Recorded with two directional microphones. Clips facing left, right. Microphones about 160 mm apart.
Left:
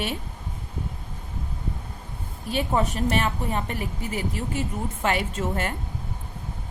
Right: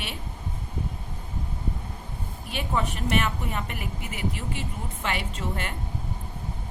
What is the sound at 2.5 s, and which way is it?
A woman's voice, 40° left (ahead or behind).